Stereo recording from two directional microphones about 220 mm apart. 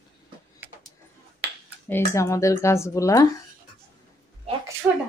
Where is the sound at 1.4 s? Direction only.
55° right (ahead or behind).